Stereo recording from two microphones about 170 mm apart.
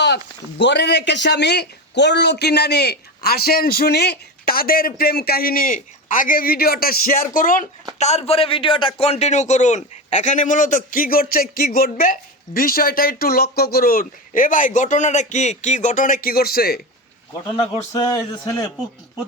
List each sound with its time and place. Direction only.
0.6 s speech: 90° left; by 7.7 s 50° left (ahead or behind)
7.9 s a man's voice: 40° left (ahead or behind); by 16.8 s 65° left (ahead or behind)
17.4 s a man's voice: 20° left (ahead or behind)